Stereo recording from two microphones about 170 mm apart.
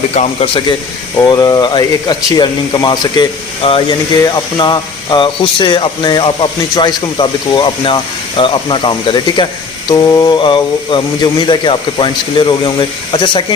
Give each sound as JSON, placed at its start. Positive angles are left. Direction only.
{"t": 0.1, "sound": "a man's voice", "side_deg": 40}
{"t": 1.2, "sound": "speech", "side_deg": 20}